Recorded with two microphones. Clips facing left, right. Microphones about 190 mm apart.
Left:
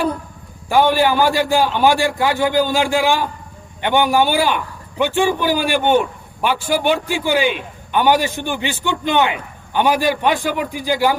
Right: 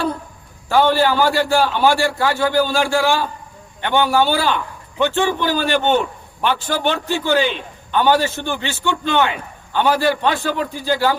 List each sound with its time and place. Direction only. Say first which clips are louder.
0.7 s a man's voice: left 1 dB; 15° left (ahead or behind)